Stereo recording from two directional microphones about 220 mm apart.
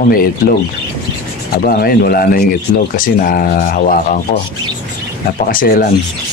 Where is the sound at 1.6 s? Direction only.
45° left (ahead or behind).